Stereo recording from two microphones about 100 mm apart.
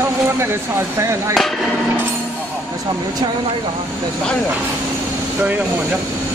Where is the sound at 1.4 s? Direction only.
Centre (ahead or behind).